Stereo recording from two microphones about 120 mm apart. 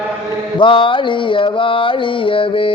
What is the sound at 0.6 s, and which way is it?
Music, 45° left (ahead or behind).